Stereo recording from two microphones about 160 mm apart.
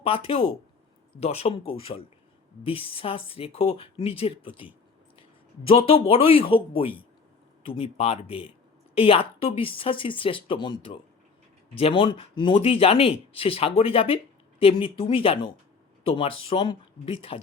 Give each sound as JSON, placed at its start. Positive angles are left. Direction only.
{"t": 0.0, "sound": "speech", "side_deg": 35}